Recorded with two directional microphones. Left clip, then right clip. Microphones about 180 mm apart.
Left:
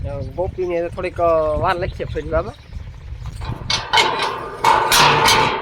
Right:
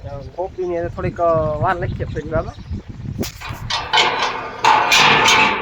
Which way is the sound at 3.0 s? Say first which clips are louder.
Right 7 dB; 65° left (ahead or behind).